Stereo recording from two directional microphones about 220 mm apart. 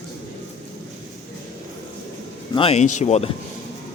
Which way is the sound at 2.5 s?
25° left (ahead or behind).